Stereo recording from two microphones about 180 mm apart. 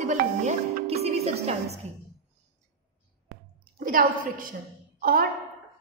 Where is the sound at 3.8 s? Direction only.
50° right (ahead or behind).